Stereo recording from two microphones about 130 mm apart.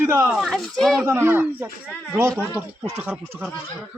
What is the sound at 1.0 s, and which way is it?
Speech, 15° right (ahead or behind).